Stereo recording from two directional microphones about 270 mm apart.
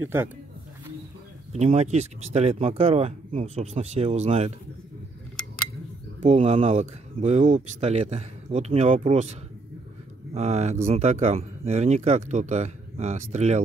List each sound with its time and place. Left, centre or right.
0.0 s speech: centre
1.5 s speech: right
6.2 s speech: right